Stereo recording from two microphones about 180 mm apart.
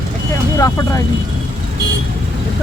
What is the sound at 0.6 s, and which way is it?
Speech, 15° left (ahead or behind).